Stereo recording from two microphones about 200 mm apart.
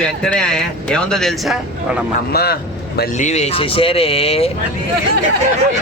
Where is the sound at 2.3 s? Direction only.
50° left (ahead or behind).